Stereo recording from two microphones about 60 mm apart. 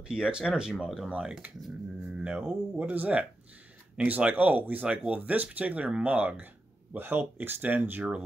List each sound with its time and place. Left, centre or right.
0.1 s speech: centre
0.8 s speech: centre
1.1 s speech: centre; by 8.1 s right